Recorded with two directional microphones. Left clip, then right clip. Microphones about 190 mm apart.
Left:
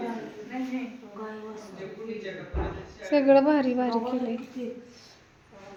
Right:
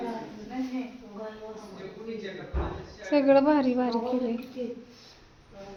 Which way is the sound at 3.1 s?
Centre (ahead or behind).